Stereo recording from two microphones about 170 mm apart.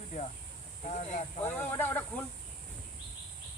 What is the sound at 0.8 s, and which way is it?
Speech, 45° left (ahead or behind).